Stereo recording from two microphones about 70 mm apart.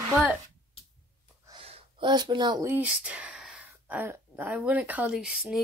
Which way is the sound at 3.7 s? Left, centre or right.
Right.